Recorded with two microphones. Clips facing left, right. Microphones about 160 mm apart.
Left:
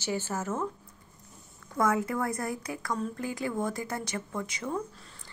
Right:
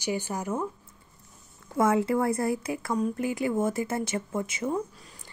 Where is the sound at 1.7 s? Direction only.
25° right (ahead or behind).